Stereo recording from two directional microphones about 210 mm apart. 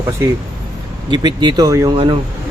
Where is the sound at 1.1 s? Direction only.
20° right (ahead or behind).